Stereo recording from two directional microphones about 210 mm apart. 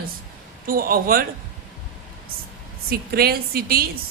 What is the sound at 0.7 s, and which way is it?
Speech, 45° right (ahead or behind).